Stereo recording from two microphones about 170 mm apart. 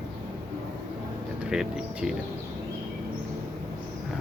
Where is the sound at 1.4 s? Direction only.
5° right (ahead or behind).